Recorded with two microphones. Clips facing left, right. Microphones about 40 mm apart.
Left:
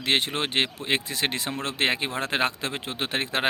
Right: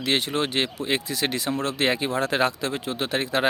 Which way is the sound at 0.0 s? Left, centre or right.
Left.